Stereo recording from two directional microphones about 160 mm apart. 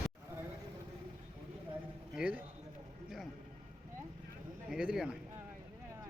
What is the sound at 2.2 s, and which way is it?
Speech, 10° right (ahead or behind).